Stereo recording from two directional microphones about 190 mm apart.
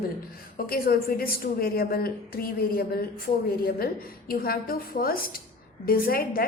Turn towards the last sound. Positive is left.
turn(degrees=50)  # may be behind; listen again after turning